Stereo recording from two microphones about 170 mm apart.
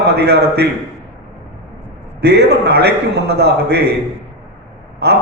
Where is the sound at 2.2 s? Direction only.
75° right (ahead or behind).